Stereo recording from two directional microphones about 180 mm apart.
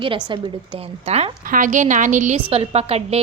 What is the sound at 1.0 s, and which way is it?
A woman's voice, 35° right (ahead or behind).